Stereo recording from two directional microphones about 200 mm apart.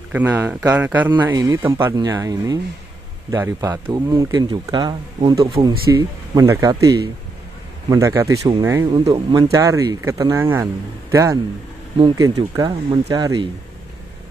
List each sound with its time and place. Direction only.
0.1 s speech: 10° right (ahead or behind)
7.9 s speech: 15° right (ahead or behind)
8.4 s speech: 30° right (ahead or behind)